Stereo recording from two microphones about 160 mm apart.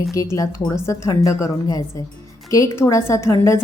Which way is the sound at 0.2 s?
20° left (ahead or behind).